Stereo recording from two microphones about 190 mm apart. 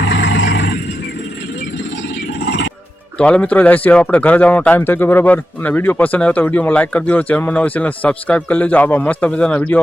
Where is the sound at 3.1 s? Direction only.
5° left (ahead or behind).